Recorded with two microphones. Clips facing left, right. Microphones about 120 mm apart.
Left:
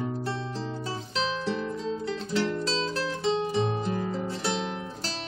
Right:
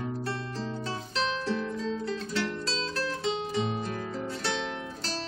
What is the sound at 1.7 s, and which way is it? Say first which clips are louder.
Music: left 1 dB; 25° left (ahead or behind).